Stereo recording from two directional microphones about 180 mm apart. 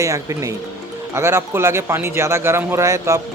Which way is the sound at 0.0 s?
15° right (ahead or behind).